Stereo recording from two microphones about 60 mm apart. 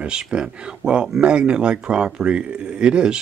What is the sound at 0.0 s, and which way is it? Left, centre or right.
Speech, centre.